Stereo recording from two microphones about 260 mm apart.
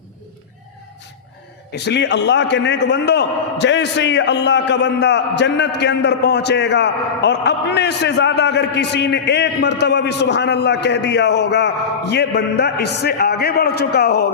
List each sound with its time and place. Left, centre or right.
1.7 s a man's voice: left